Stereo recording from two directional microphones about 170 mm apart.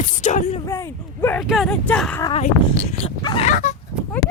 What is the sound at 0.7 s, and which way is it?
Speech, 15° left (ahead or behind).